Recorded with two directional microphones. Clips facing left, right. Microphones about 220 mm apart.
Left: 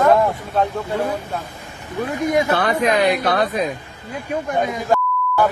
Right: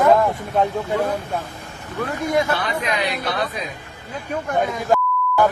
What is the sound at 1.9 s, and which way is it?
Speech, 15° left (ahead or behind).